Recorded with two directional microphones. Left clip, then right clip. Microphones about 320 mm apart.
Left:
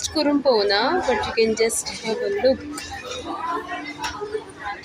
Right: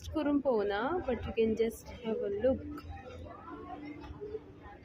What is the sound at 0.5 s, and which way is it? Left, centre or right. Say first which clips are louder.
Speech: left 13 dB; centre.